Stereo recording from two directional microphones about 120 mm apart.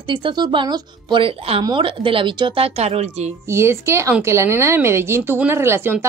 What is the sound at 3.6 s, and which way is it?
Speech, 25° right (ahead or behind).